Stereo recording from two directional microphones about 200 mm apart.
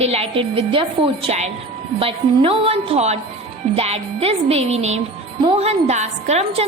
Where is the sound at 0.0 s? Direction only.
30° right (ahead or behind).